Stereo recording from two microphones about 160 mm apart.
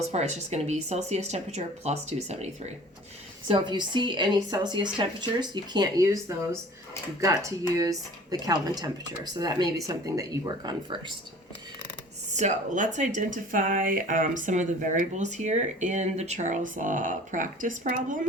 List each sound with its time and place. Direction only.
0.1 s speech: 45° right (ahead or behind)
3.5 s speech: 30° right (ahead or behind)
12.3 s speech: 50° right (ahead or behind)